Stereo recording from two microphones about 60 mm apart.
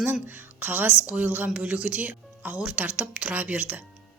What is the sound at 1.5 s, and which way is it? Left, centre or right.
A woman's voice, centre.